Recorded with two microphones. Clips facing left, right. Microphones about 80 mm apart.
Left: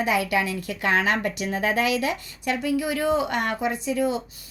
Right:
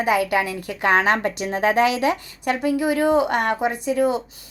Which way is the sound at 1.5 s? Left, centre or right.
Right.